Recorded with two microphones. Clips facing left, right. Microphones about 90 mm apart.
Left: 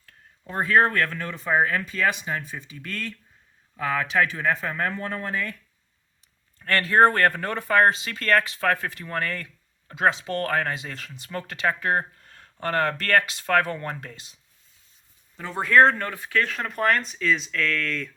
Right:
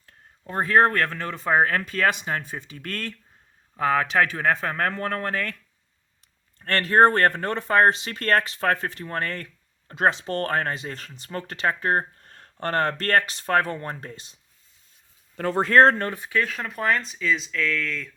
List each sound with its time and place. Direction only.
0.5 s speech: 35° right (ahead or behind); by 5.5 s 60° right (ahead or behind)
6.8 s speech: 40° right (ahead or behind)
7.2 s speech: 25° right (ahead or behind)
15.5 s speech: 35° right (ahead or behind)
16.0 s speech: 15° right (ahead or behind)
16.4 s speech: centre (ahead or behind)